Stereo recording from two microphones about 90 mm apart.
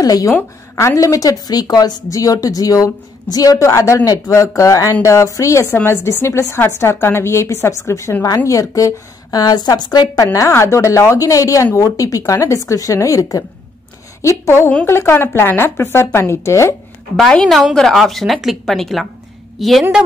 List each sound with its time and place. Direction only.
0.0 s a woman's voice: 40° left (ahead or behind)
0.3 s a woman's voice: 30° left (ahead or behind); by 10.0 s 50° left (ahead or behind)
10.1 s a woman's voice: 40° left (ahead or behind)
17.3 s a woman's voice: 5° left (ahead or behind)